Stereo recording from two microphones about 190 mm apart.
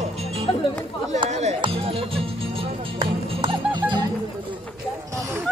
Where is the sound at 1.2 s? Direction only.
35° right (ahead or behind).